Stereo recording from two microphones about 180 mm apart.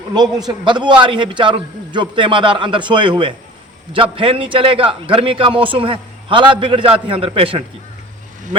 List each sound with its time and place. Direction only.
0.4 s a man's voice: 25° right (ahead or behind)